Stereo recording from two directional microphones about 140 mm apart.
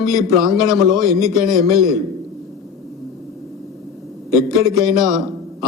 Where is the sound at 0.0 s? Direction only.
Centre (ahead or behind).